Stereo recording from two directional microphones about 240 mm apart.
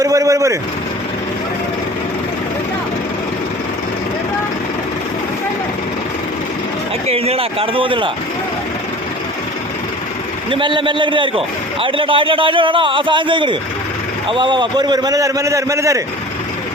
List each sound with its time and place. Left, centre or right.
0.0 s vehicle: centre
7.1 s a man's voice: right
10.5 s a man's voice: centre